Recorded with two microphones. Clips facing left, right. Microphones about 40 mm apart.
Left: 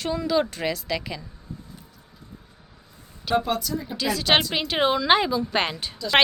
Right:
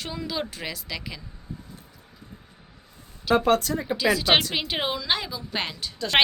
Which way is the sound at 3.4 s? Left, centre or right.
Right.